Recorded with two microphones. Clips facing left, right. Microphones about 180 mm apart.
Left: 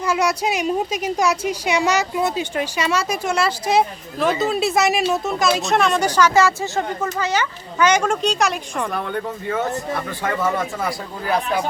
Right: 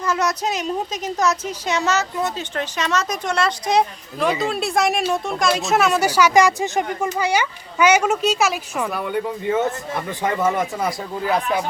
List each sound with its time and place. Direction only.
0.0 s a woman's voice: 10° left (ahead or behind); by 11.3 s 20° right (ahead or behind)